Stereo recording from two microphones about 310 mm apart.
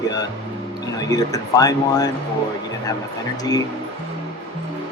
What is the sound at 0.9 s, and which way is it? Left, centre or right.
Speech, centre.